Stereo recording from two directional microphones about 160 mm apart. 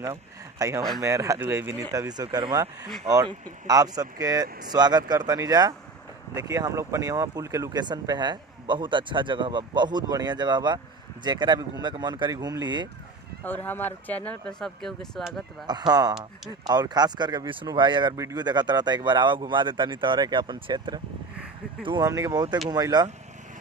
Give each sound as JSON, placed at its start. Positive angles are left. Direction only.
{"t": 0.0, "sound": "speech", "side_deg": -20}
{"t": 13.4, "sound": "speech", "side_deg": 10}
{"t": 15.6, "sound": "speech", "side_deg": -25}